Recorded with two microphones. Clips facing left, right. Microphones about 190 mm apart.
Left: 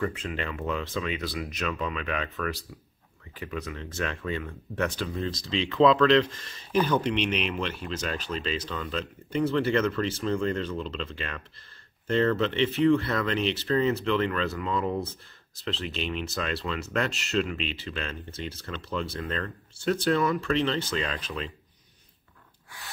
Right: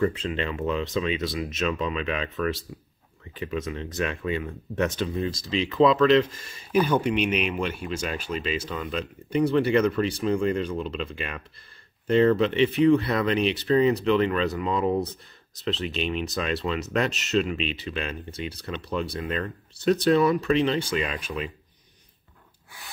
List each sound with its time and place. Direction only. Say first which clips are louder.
0.0 s speech: right 5 dB; 25° right (ahead or behind)
5.3 s speech: right 2 dB; 5° right (ahead or behind)